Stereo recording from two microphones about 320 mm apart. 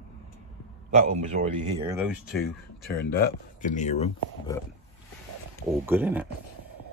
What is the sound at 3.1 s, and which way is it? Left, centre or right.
Speech, left.